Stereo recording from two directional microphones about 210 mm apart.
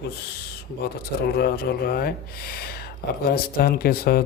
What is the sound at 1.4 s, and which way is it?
Speech, 45° left (ahead or behind).